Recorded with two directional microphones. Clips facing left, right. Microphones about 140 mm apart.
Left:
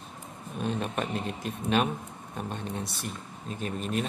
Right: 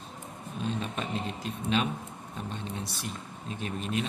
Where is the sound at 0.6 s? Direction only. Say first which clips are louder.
Left 3 dB; 55° left (ahead or behind).